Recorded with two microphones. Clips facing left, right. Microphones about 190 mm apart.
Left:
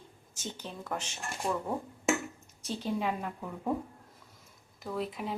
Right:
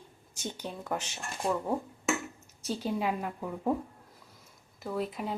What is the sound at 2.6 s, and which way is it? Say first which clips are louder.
Speech: right 1 dB; 5° right (ahead or behind).